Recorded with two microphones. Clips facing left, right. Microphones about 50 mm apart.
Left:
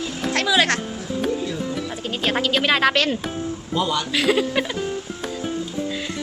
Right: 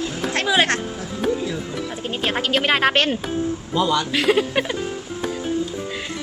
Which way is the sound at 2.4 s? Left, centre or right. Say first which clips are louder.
Even; right.